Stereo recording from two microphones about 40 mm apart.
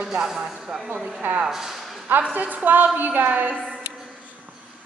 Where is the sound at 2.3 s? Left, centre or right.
Right.